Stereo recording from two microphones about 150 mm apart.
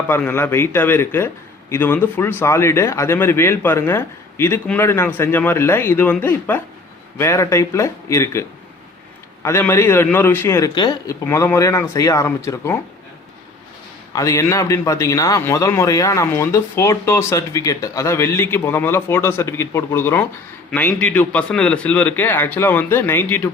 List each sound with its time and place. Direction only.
0.1 s a man's voice: 15° left (ahead or behind)
14.1 s a man's voice: 20° left (ahead or behind)